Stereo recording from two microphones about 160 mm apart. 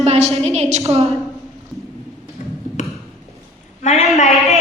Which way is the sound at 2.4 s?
50° left (ahead or behind).